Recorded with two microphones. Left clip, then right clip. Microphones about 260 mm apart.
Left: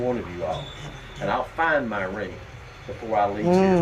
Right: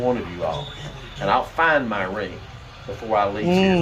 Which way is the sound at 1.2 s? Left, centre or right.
Centre.